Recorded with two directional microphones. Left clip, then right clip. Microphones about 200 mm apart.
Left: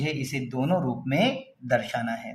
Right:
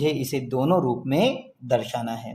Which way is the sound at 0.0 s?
40° right (ahead or behind).